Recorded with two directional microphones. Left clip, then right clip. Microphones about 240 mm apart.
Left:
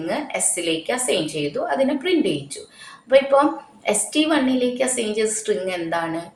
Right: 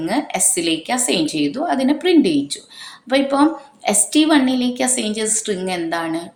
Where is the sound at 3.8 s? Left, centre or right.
Right.